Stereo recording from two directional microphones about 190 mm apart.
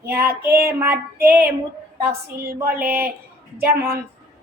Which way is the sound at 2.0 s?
55° right (ahead or behind).